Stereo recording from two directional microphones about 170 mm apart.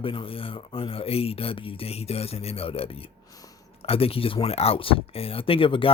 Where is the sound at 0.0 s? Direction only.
30° left (ahead or behind).